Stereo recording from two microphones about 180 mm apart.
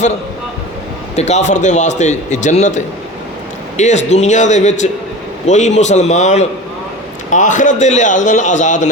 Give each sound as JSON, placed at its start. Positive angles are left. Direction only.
{"t": 1.1, "sound": "a man's voice", "side_deg": 40}